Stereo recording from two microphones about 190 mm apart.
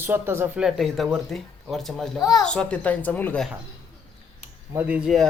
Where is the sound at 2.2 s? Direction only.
20° left (ahead or behind).